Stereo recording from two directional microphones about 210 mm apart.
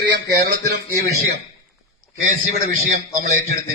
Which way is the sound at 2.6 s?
40° right (ahead or behind).